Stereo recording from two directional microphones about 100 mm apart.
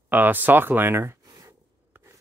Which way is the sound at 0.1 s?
20° right (ahead or behind).